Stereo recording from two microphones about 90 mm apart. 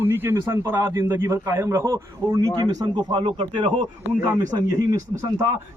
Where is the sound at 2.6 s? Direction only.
50° right (ahead or behind); by 3.7 s 65° right (ahead or behind).